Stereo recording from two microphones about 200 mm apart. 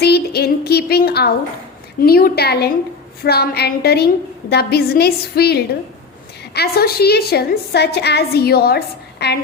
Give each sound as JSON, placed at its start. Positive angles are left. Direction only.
{"t": 0.0, "sound": "a woman's voice", "side_deg": 50}